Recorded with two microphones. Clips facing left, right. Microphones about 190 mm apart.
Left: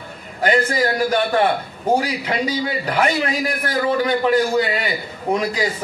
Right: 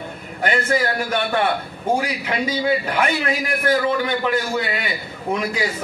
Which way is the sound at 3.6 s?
35° left (ahead or behind).